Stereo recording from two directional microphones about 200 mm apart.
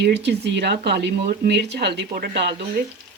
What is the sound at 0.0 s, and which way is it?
Speech, 55° right (ahead or behind).